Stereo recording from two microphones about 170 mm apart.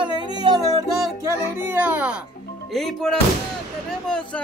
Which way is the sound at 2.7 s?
Centre (ahead or behind).